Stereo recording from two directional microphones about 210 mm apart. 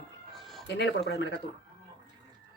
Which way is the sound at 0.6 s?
55° left (ahead or behind).